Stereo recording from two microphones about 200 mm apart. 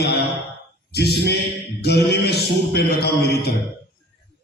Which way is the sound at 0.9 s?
55° left (ahead or behind).